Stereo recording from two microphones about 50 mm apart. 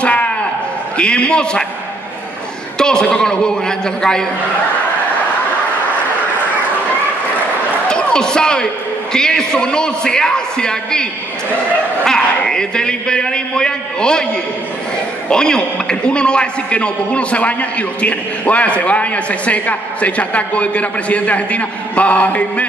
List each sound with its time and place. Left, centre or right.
0.0 s a sound: left
0.9 s a man's voice: left
2.8 s a man's voice: centre
7.9 s a man's voice: centre
12.0 s a sound: centre
15.2 s a man's voice: centre